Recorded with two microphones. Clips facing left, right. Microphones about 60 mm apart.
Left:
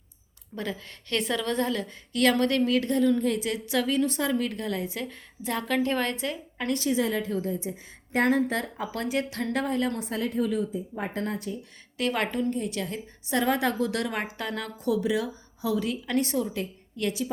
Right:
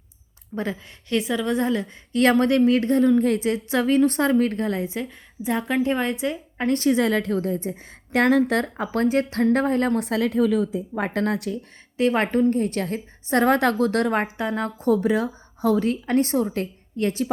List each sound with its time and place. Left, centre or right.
0.5 s a woman's voice: right
0.9 s a woman's voice: centre; by 5.0 s right
5.0 s a woman's voice: centre
6.7 s a woman's voice: right
8.1 s a woman's voice: right
10.0 s a woman's voice: right
11.9 s a woman's voice: right
12.3 s a woman's voice: right
14.3 s a woman's voice: right